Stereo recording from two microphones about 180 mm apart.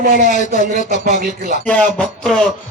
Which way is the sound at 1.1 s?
40° right (ahead or behind).